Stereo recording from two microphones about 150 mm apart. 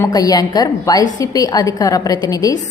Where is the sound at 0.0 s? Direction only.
25° left (ahead or behind).